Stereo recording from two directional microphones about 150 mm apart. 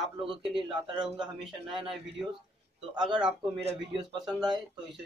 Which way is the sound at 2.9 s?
30° right (ahead or behind).